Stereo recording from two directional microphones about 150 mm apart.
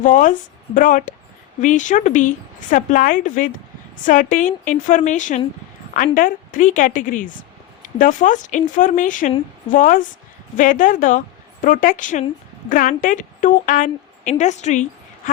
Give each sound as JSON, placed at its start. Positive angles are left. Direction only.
{"t": 0.0, "sound": "a woman's voice", "side_deg": 60}